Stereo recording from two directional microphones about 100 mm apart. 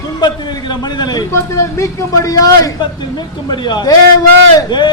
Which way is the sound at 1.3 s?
25° left (ahead or behind).